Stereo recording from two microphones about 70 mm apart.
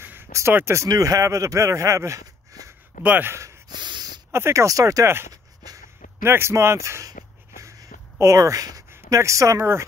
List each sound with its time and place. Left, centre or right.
0.0 s a sound: right
0.5 s speech: right
0.8 s speech: right
3.0 s speech: right
3.6 s snort: right
4.3 s speech: right
5.0 s speech: right
8.2 s speech: right